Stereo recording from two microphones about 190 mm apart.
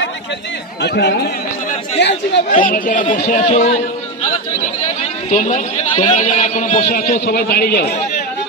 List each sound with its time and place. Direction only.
0.8 s speech: 60° left (ahead or behind)
2.6 s a man's voice: 45° left (ahead or behind)
5.3 s a man's voice: 40° left (ahead or behind); by 7.9 s 55° left (ahead or behind)